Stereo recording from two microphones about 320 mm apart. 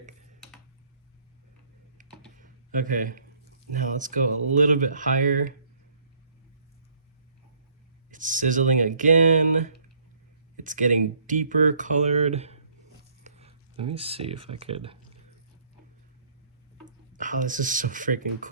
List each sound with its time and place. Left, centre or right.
2.0 s computer keyboard: right
2.4 s a sound: right
3.7 s speech: right
8.1 s speech: right
16.8 s speech: right